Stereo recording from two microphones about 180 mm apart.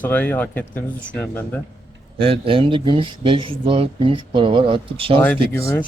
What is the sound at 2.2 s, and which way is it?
Speech, 30° right (ahead or behind).